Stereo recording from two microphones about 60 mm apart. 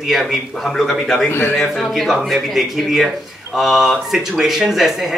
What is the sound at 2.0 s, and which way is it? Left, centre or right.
Speech, centre.